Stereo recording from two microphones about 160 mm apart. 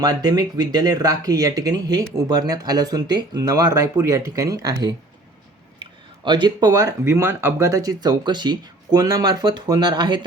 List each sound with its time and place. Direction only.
0.0 s speech: 25° right (ahead or behind)